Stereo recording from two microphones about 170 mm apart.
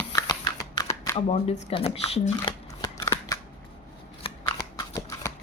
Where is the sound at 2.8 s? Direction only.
15° left (ahead or behind).